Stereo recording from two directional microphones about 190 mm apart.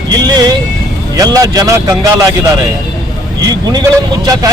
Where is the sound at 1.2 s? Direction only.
20° right (ahead or behind).